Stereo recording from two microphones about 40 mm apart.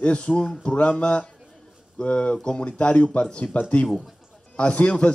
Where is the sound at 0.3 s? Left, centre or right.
Centre; by 3.8 s left.